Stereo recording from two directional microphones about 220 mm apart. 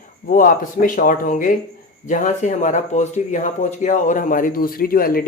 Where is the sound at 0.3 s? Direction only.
40° left (ahead or behind).